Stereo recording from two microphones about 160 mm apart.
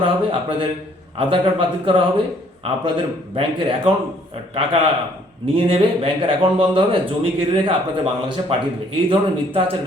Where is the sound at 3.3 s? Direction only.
35° right (ahead or behind).